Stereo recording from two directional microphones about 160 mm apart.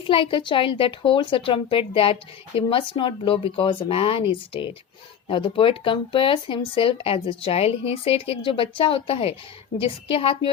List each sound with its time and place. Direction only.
0.1 s speech: 30° left (ahead or behind)